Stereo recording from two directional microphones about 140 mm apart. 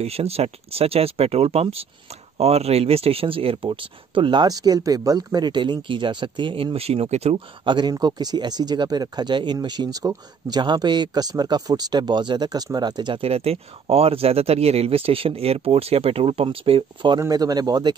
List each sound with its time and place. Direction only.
0.0 s speech: 45° right (ahead or behind)
17.2 s speech: 25° right (ahead or behind)